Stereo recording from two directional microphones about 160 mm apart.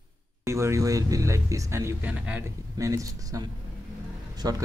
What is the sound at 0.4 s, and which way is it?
Speech, 15° right (ahead or behind).